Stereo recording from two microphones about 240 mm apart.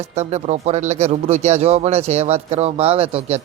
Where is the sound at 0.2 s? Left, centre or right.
Right.